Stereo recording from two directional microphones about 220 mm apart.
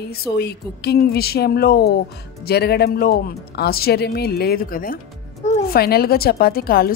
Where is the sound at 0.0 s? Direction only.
45° left (ahead or behind).